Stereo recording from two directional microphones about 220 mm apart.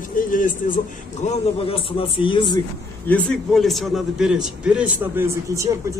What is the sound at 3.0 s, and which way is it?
A man's voice, 5° left (ahead or behind).